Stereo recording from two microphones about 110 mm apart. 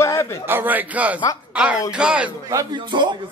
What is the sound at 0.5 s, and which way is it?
A man's voice, 15° right (ahead or behind).